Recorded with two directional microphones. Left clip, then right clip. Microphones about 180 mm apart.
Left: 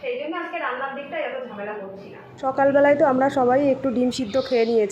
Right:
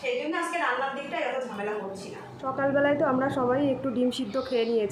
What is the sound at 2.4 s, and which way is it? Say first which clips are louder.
A woman's voice: left 8 dB; 35° left (ahead or behind).